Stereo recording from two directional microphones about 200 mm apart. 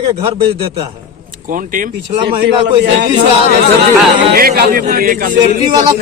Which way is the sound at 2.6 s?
60° right (ahead or behind).